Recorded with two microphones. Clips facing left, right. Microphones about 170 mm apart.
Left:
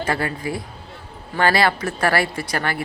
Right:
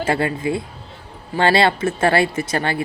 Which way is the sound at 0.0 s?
25° right (ahead or behind).